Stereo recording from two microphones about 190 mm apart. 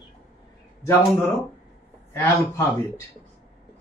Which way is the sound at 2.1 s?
10° left (ahead or behind).